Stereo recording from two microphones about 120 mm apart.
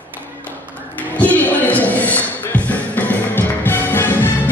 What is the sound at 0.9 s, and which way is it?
Music, 10° left (ahead or behind).